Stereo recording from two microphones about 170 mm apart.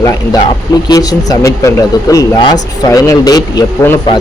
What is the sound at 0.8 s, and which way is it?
A man's voice, 20° left (ahead or behind).